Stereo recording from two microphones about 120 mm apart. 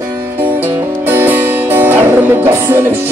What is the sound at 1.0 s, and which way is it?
Music, 15° right (ahead or behind).